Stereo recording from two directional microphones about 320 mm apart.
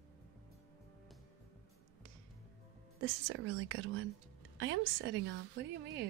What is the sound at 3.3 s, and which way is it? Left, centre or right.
A woman's voice, right.